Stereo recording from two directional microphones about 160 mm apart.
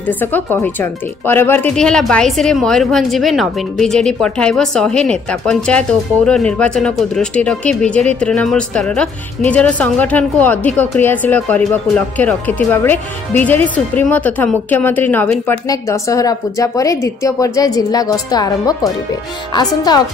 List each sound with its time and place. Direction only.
0.0 s a woman's voice: 10° left (ahead or behind)
15.7 s a woman's voice: 20° left (ahead or behind)